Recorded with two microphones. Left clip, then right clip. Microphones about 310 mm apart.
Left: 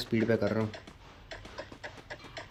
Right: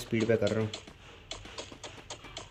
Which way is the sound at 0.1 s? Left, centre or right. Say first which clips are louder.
Right 1 dB; centre.